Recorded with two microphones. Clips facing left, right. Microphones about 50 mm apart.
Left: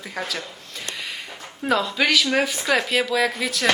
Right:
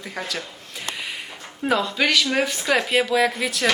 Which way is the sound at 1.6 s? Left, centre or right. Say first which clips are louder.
Even; centre.